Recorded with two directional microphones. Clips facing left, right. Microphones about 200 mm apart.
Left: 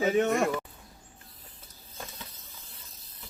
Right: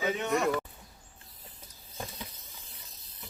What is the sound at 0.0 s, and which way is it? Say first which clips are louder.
Speech: left 5 dB; 50° left (ahead or behind).